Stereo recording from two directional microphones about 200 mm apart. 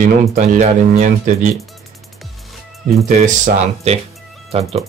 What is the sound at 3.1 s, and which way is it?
Speech, 35° right (ahead or behind).